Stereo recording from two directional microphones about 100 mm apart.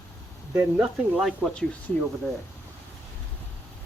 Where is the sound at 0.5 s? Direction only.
15° right (ahead or behind).